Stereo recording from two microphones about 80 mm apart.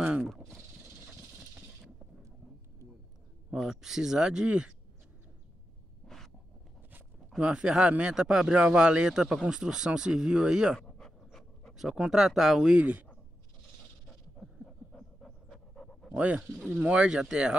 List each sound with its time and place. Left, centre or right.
0.0 s a sound: centre
3.5 s speech: centre
7.3 s speech: centre
10.8 s pant: centre
14.4 s pant: centre
16.1 s speech: centre